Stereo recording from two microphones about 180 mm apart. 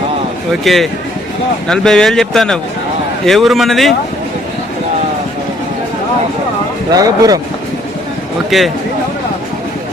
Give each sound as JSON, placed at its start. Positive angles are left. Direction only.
{"t": 0.6, "sound": "speech", "side_deg": 0}
{"t": 6.9, "sound": "speech", "side_deg": -20}
{"t": 8.4, "sound": "speech", "side_deg": 0}